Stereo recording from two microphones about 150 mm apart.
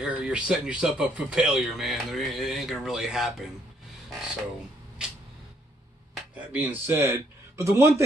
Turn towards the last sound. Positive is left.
turn(degrees=-20)  # may be behind; listen again after turning